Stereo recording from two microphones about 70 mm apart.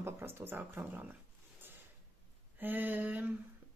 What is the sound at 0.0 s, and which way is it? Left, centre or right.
A woman's voice, right.